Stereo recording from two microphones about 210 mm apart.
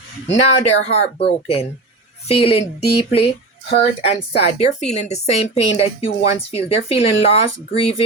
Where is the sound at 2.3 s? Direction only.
30° left (ahead or behind).